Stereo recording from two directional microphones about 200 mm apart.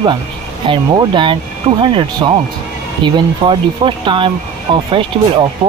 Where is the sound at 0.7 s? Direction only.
25° right (ahead or behind).